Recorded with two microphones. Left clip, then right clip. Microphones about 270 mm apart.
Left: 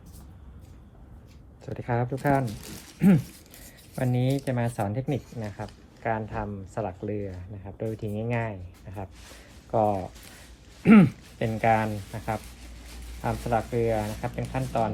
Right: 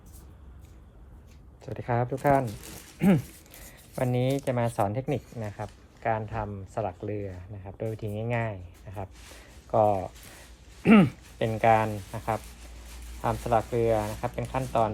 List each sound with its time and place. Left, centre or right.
1.6 s speech: right
3.0 s speech: right